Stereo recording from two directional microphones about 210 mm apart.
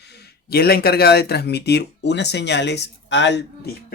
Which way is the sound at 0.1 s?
50° left (ahead or behind).